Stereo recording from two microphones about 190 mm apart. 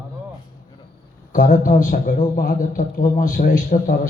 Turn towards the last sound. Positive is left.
turn(degrees=45)  # may be behind; listen again after turning